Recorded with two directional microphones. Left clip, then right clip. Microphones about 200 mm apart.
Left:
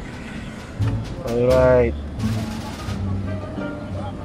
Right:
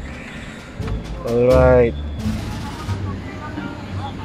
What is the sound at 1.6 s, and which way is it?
Speech, 10° right (ahead or behind).